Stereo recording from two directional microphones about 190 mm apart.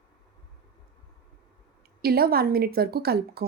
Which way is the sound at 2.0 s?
55° right (ahead or behind).